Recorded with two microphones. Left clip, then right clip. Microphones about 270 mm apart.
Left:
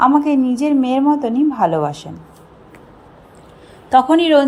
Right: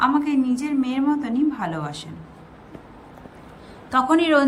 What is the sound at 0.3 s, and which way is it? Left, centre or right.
Speech, centre.